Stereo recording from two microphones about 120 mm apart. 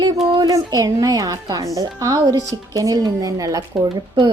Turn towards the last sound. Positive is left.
turn(degrees=-30)  # may be behind; listen again after turning